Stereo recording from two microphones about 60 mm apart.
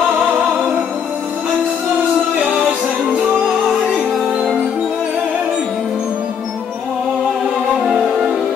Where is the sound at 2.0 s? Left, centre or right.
Centre.